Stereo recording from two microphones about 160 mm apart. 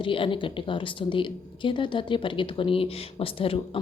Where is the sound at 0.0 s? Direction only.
30° left (ahead or behind).